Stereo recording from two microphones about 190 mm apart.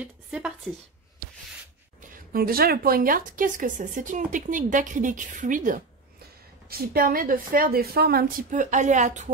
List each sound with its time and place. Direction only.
0.0 s a woman's voice: 5° right (ahead or behind)
2.0 s a woman's voice: 50° right (ahead or behind)